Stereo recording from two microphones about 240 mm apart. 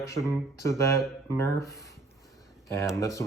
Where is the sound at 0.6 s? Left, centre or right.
Centre.